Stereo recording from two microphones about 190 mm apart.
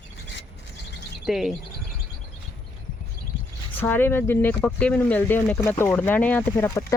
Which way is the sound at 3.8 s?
10° left (ahead or behind).